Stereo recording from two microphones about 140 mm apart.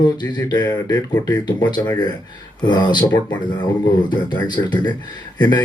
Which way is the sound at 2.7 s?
30° left (ahead or behind).